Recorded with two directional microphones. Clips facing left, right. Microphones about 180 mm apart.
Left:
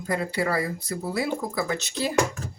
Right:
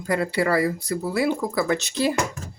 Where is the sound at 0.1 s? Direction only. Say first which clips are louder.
Right 4 dB; 75° right (ahead or behind).